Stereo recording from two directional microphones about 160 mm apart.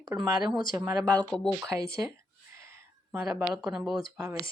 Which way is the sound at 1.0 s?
5° left (ahead or behind).